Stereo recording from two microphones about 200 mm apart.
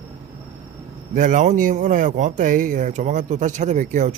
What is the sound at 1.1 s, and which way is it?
Speech, 40° right (ahead or behind).